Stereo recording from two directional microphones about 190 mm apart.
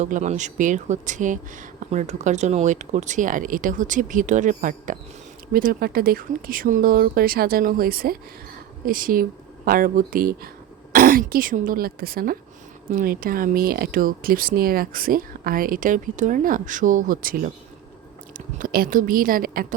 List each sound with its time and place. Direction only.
0.0 s a woman's voice: 40° right (ahead or behind)